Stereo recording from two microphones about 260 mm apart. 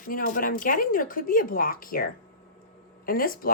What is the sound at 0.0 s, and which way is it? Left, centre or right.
Speech, left.